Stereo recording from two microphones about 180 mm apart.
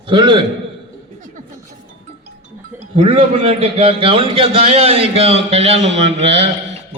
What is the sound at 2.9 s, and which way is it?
A man's voice, 30° right (ahead or behind).